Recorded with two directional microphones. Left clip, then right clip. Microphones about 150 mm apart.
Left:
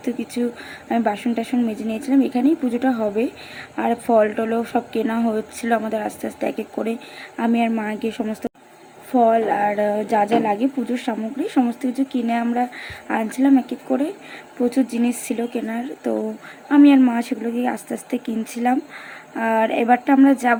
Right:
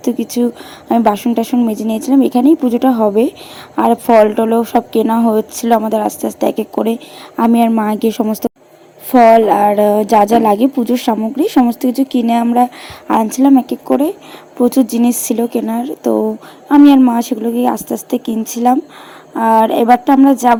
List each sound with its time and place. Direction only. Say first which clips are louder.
0.0 s speech: right 9 dB; 30° right (ahead or behind)
9.1 s a woman's voice: right 9 dB; 45° right (ahead or behind); by 20.6 s 20° right (ahead or behind)